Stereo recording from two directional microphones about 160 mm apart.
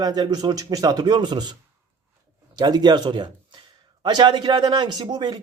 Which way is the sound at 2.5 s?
25° right (ahead or behind).